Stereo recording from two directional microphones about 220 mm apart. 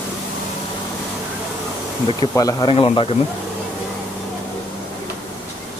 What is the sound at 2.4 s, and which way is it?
Speech, 20° left (ahead or behind).